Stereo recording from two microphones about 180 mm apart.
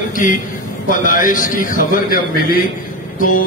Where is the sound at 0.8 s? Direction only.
50° left (ahead or behind).